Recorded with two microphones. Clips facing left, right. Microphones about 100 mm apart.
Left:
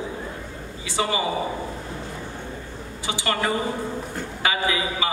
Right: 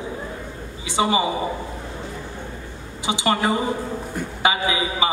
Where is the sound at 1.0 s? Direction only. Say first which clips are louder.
Right 5 dB; 20° right (ahead or behind).